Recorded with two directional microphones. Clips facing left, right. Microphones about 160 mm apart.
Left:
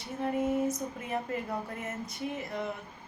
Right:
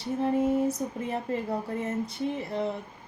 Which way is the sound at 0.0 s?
30° right (ahead or behind).